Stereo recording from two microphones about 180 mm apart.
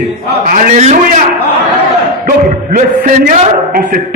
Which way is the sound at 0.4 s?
50° right (ahead or behind).